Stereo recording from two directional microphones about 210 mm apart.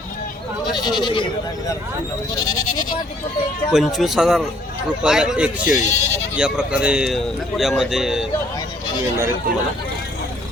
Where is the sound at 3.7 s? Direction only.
Centre (ahead or behind).